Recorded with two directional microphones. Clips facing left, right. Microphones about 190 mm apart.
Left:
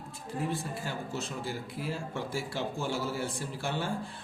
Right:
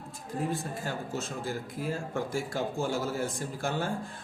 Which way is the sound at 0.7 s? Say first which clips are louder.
Right 2 dB; 45° right (ahead or behind).